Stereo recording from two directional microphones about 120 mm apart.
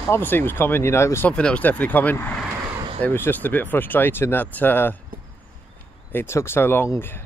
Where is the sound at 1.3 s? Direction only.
10° left (ahead or behind).